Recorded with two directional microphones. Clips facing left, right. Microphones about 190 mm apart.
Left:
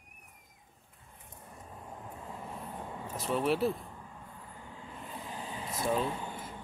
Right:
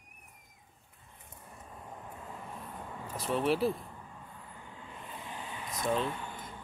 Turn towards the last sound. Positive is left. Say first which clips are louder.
# left 1 dB
turn(degrees=5)  # may be behind; listen again after turning